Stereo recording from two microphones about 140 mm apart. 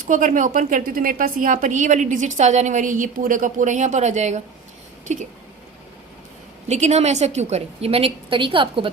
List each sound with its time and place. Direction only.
0.1 s a woman's voice: 65° right (ahead or behind)
6.7 s a woman's voice: 55° right (ahead or behind); by 8.9 s 40° right (ahead or behind)